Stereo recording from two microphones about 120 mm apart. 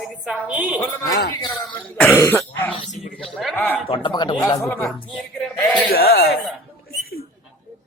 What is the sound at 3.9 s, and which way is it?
Speech, 40° left (ahead or behind).